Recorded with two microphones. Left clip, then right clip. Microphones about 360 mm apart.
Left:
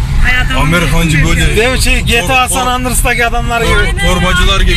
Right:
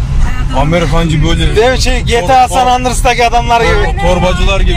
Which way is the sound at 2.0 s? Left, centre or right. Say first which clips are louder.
Right 4 dB; right.